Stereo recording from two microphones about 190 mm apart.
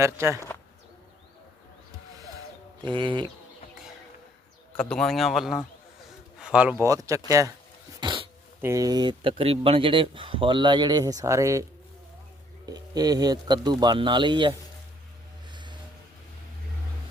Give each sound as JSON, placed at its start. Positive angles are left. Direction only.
{"t": 0.0, "sound": "speech", "side_deg": -15}
{"t": 2.8, "sound": "speech", "side_deg": -25}
{"t": 4.8, "sound": "speech", "side_deg": 5}
{"t": 6.4, "sound": "a sound", "side_deg": -5}
{"t": 6.8, "sound": "speech", "side_deg": -15}
{"t": 8.6, "sound": "speech", "side_deg": -20}
{"t": 12.6, "sound": "speech", "side_deg": -20}